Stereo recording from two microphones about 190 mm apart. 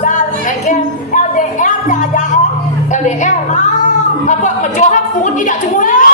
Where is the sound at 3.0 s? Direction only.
40° left (ahead or behind).